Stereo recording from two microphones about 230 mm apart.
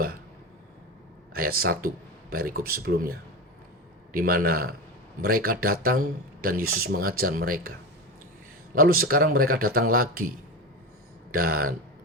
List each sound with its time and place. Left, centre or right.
1.3 s speech: right
8.7 s speech: right